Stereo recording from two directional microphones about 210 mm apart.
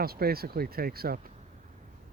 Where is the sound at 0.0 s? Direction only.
45° right (ahead or behind).